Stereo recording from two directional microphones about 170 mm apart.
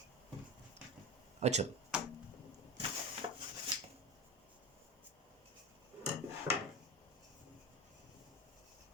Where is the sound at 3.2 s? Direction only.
30° right (ahead or behind).